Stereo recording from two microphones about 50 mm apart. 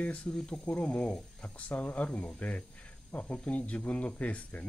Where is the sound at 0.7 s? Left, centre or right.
Left.